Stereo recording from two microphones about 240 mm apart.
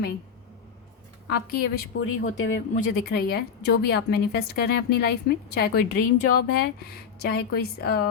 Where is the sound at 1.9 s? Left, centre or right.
Left.